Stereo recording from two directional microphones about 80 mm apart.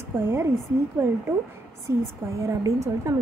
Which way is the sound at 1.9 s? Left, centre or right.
Right.